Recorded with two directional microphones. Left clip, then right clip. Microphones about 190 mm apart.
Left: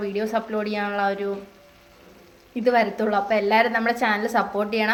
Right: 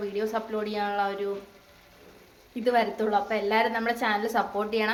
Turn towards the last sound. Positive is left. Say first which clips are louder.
# left 4 dB
turn(degrees=25)  # may be behind; listen again after turning